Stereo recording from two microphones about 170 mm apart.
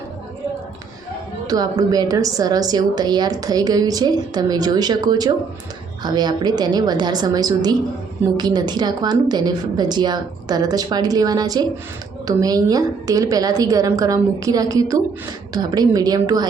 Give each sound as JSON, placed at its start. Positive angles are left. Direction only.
{"t": 1.5, "sound": "a woman's voice", "side_deg": -25}